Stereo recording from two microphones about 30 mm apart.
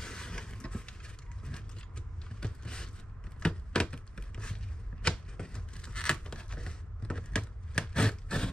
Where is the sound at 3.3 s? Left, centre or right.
Left.